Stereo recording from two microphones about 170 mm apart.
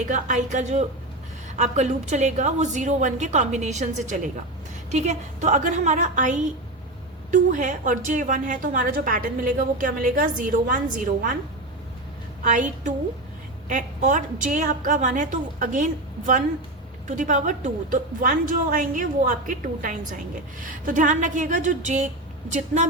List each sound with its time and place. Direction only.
0.0 s a woman's voice: 45° right (ahead or behind)
12.4 s a woman's voice: 50° right (ahead or behind)
13.7 s a woman's voice: 50° right (ahead or behind)